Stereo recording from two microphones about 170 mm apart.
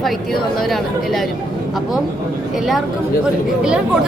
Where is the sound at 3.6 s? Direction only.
5° right (ahead or behind).